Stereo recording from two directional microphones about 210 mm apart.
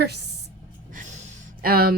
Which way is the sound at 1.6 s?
45° right (ahead or behind).